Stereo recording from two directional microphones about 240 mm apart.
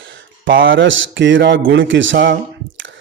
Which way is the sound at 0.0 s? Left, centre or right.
Right.